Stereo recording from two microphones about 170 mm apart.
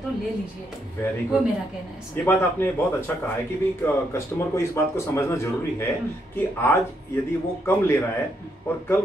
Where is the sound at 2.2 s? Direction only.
15° left (ahead or behind).